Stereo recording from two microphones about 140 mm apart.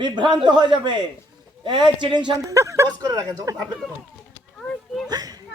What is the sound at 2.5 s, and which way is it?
Speech, 20° right (ahead or behind).